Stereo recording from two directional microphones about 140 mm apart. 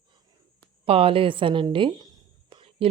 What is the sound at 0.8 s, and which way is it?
A woman's voice, 45° right (ahead or behind).